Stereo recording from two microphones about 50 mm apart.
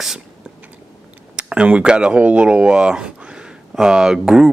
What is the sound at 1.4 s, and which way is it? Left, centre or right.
Speech, right.